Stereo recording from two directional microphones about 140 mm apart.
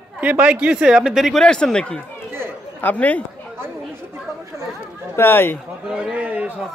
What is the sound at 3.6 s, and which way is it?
Chatter, 20° right (ahead or behind).